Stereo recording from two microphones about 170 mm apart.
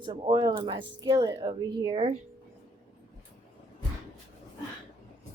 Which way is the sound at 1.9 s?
35° right (ahead or behind).